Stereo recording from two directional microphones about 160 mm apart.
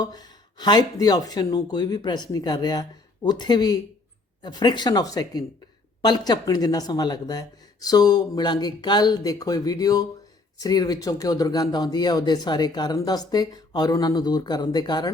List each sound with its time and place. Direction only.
0.0 s speech: 25° left (ahead or behind)